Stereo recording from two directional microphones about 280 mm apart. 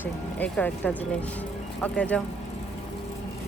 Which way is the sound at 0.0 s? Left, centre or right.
Centre.